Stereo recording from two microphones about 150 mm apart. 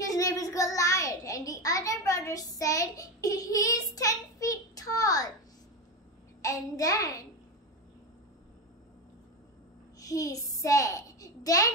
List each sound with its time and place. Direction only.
0.1 s child singing: 25° left (ahead or behind)
6.4 s a child's voice: 20° left (ahead or behind)
9.9 s a child's voice: 25° left (ahead or behind)